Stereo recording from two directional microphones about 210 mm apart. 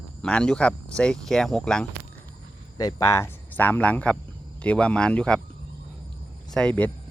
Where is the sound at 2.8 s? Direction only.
15° left (ahead or behind).